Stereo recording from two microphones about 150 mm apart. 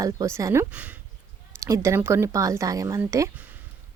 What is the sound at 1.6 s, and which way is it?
Speech, 20° right (ahead or behind).